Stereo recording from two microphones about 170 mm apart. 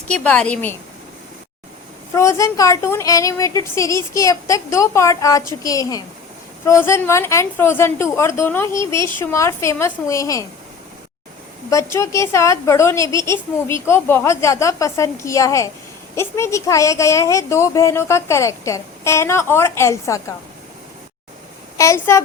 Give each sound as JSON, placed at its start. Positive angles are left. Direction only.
{"t": 0.1, "sound": "a woman's voice", "side_deg": 5}
{"t": 2.1, "sound": "a woman's voice", "side_deg": 20}
{"t": 11.7, "sound": "a woman's voice", "side_deg": 15}
{"t": 21.8, "sound": "a woman's voice", "side_deg": 15}